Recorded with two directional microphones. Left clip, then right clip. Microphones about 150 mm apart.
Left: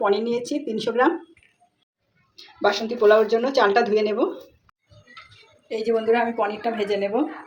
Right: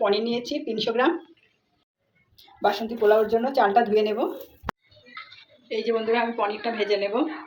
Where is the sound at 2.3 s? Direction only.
45° left (ahead or behind).